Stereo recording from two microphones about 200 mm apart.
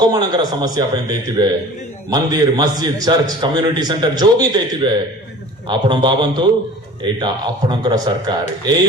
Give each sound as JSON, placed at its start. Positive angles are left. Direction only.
{"t": 0.0, "sound": "a man's voice", "side_deg": -20}